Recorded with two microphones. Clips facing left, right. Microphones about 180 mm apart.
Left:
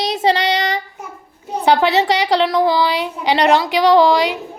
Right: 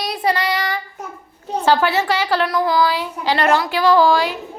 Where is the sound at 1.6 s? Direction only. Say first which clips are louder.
Left 3 dB; 20° left (ahead or behind).